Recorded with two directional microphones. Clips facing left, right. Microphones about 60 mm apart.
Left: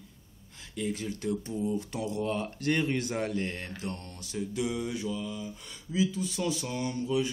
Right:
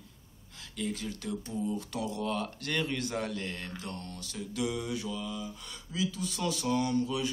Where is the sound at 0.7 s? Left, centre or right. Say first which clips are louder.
Left 2 dB; centre.